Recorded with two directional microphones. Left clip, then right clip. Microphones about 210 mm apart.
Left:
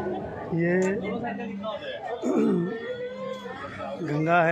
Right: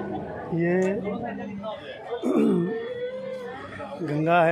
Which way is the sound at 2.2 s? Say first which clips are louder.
Right 2 dB; 15° right (ahead or behind).